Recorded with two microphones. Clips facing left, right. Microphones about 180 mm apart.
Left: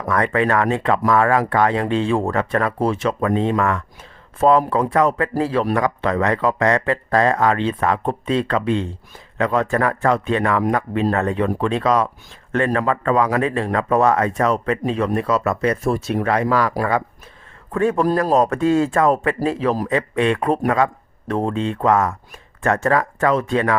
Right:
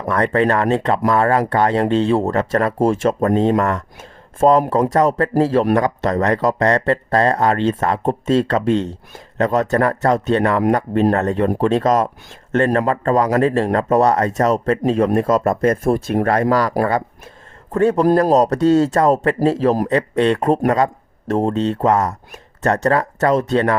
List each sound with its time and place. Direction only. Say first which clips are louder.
0.1 s speech: right 2 dB; 35° right (ahead or behind)
17.7 s speech: right 4 dB; 35° right (ahead or behind)